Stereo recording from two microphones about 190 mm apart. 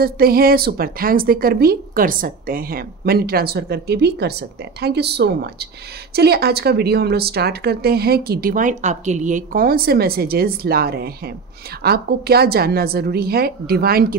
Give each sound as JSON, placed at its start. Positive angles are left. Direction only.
{"t": 0.0, "sound": "a woman's voice", "side_deg": -55}